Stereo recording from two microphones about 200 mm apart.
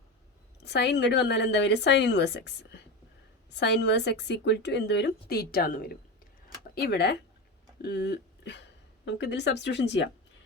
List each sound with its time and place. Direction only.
0.6 s a woman's voice: 55° left (ahead or behind)